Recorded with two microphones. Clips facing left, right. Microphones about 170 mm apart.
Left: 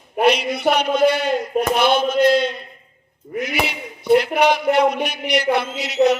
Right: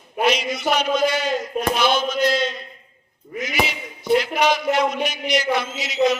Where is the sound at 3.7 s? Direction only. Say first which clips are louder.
Left 7 dB; 60° left (ahead or behind).